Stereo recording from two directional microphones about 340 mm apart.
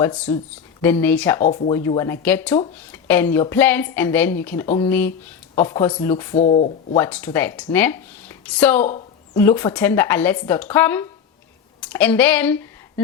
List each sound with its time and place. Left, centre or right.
0.0 s a woman's voice: centre
1.4 s speech: left
1.7 s a woman's voice: centre
6.3 s speech: centre
6.9 s a woman's voice: centre